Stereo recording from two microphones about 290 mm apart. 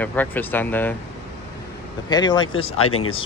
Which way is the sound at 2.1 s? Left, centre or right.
Centre.